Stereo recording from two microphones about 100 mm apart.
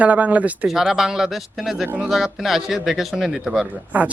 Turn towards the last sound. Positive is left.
turn(degrees=-15)  # may be behind; listen again after turning